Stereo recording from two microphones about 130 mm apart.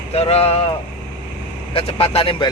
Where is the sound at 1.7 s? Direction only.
45° left (ahead or behind).